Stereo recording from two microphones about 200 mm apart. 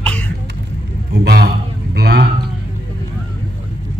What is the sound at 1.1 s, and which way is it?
A man's voice, 55° right (ahead or behind).